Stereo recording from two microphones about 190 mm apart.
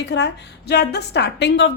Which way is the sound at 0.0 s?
65° left (ahead or behind).